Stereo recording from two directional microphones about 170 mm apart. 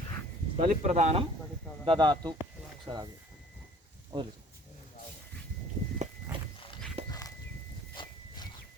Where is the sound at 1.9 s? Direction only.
25° right (ahead or behind).